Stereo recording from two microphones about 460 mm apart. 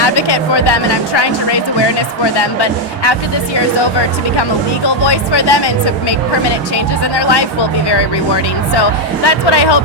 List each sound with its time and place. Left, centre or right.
0.0 s speech: left
2.6 s speech: left
5.0 s speech: left
8.7 s speech: left